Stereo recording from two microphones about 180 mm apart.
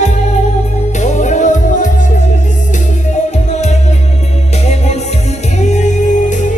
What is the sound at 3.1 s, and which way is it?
Music, 40° left (ahead or behind).